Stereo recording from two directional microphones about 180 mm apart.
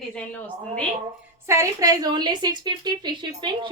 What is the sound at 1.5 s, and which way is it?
A woman's voice, 20° right (ahead or behind).